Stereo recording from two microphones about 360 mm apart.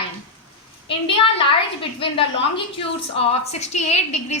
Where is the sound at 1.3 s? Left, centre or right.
Centre.